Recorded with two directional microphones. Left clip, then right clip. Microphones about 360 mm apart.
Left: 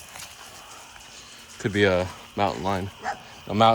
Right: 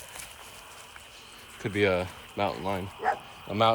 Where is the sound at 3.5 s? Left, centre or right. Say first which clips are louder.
Left 5 dB; left.